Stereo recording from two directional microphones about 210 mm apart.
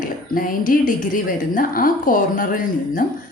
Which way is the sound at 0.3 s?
40° left (ahead or behind).